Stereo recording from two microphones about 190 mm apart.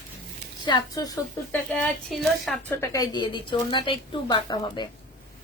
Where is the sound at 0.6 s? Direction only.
20° left (ahead or behind).